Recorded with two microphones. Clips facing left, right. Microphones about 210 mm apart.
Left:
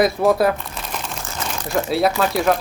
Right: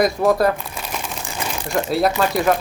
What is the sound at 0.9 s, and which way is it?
Crumpling, 5° right (ahead or behind).